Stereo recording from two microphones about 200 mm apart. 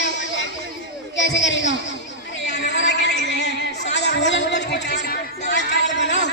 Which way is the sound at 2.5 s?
60° left (ahead or behind).